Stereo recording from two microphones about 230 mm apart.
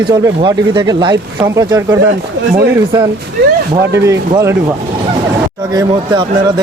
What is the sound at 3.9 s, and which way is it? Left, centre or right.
Speech, centre.